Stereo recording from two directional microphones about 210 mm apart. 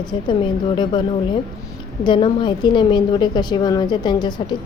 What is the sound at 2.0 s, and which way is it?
Speech, 25° left (ahead or behind).